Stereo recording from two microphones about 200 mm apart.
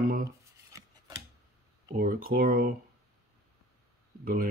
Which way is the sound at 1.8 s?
45° right (ahead or behind).